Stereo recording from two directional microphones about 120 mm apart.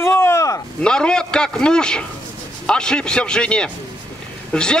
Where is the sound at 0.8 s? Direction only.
5° left (ahead or behind).